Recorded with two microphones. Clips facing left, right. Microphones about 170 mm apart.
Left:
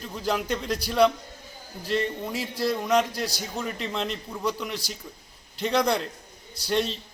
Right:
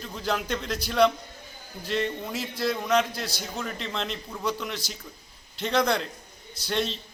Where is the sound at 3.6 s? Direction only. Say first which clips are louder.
Left 3 dB; 5° left (ahead or behind).